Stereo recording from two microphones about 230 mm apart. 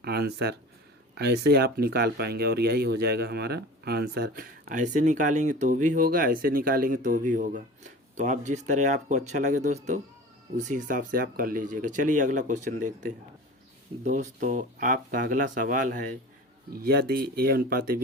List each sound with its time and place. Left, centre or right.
0.0 s speech: right